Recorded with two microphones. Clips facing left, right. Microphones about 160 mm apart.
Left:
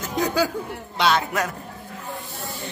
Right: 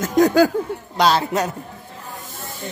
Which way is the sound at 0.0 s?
45° right (ahead or behind).